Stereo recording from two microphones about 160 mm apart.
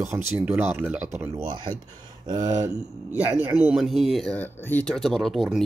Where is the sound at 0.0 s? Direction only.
15° right (ahead or behind).